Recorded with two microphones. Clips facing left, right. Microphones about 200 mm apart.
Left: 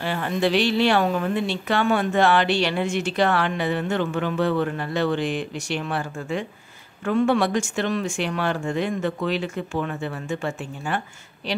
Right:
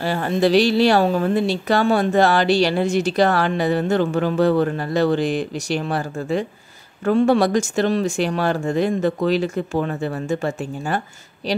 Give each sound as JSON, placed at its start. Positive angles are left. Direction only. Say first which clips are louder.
{"t": 0.0, "sound": "speech", "louder": "right 4 dB", "side_deg": -40}